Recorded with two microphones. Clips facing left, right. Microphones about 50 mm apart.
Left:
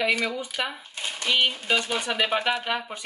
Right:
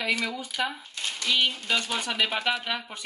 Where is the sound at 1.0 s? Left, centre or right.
Centre.